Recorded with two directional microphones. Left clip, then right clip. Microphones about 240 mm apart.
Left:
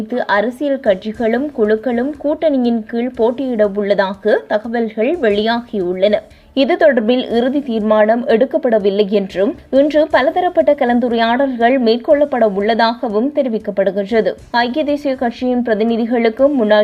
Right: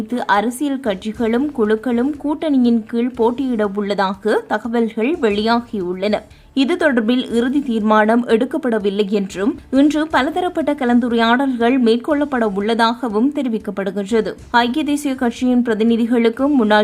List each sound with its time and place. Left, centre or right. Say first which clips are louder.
0.1 s speech: left 1 dB; centre